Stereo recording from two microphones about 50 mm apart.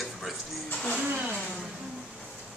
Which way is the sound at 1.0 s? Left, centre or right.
Right.